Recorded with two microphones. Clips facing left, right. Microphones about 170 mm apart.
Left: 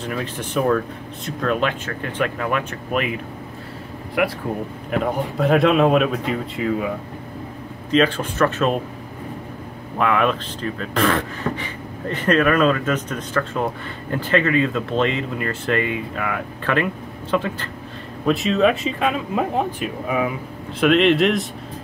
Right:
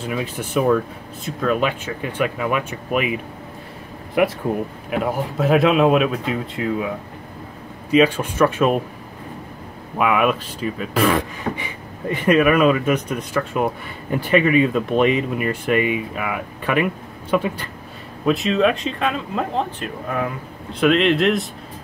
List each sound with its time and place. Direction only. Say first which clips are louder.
0.1 s speech: right 2 dB; 10° right (ahead or behind)
4.2 s speech: right 3 dB; 20° right (ahead or behind)
4.9 s speech: even; 5° right (ahead or behind)
7.9 s speech: right 2 dB; 10° right (ahead or behind)
9.9 s speech: right 1 dB; 10° right (ahead or behind)
18.2 s speech: even; centre (ahead or behind)